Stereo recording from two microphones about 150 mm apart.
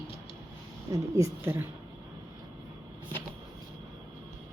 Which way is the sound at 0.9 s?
20° right (ahead or behind).